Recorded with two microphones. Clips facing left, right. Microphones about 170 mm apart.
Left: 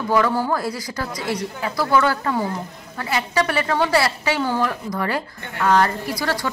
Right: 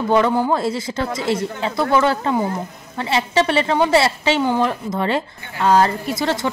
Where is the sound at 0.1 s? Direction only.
20° right (ahead or behind).